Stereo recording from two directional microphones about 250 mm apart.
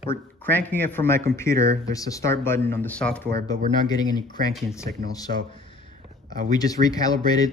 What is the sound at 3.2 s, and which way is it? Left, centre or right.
Speech, right.